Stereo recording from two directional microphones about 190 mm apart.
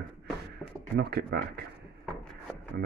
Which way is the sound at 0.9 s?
55° right (ahead or behind).